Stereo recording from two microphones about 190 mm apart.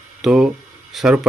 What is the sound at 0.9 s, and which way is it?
Speech, centre (ahead or behind).